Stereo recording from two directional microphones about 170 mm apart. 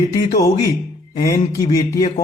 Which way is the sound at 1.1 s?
20° left (ahead or behind).